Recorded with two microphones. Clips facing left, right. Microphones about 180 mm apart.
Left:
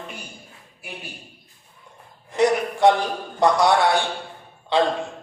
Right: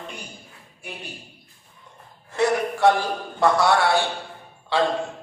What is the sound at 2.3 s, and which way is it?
A man's voice, 15° left (ahead or behind).